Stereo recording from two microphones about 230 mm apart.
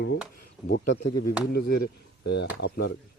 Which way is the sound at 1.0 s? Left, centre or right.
Left.